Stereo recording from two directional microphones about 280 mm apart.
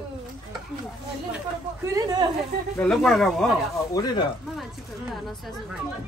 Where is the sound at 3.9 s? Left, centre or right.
Centre.